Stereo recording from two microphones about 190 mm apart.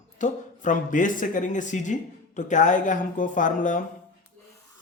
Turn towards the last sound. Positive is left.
turn(degrees=45)  # may be behind; listen again after turning